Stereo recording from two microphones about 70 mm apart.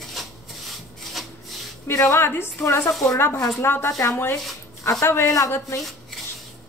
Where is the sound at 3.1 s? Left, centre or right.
Left.